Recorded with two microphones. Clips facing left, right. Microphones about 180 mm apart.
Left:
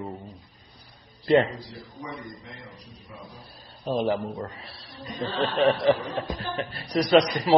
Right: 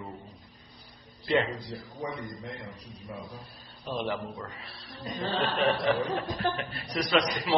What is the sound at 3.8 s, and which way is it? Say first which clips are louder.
A man's voice: left 7 dB; 40° left (ahead or behind).